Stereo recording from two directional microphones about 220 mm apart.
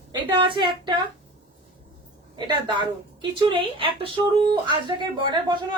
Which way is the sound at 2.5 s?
20° right (ahead or behind).